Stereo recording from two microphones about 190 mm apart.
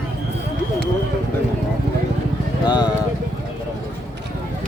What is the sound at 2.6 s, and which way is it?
Speech, 20° left (ahead or behind).